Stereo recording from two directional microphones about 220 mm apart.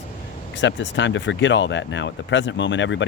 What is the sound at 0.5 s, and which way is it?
Speech, 55° left (ahead or behind).